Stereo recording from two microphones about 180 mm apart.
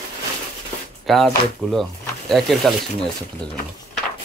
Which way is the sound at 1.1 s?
Centre (ahead or behind).